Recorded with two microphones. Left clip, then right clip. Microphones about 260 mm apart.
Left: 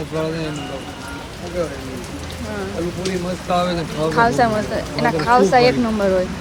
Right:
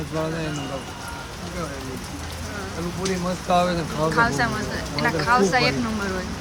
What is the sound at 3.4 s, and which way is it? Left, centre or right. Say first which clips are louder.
Speech: left 1 dB; right.